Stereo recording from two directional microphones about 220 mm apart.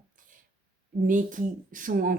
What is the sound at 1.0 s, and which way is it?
Speech, 35° right (ahead or behind).